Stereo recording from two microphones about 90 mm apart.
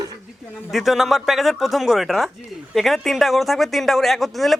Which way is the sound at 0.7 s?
Centre (ahead or behind).